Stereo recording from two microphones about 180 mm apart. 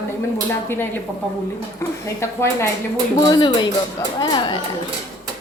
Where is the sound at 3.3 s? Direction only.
25° left (ahead or behind).